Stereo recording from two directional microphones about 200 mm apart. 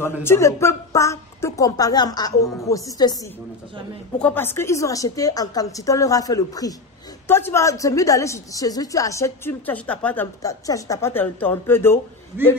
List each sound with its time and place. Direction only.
0.0 s a woman's voice: 10° left (ahead or behind)
4.2 s a woman's voice: 10° left (ahead or behind)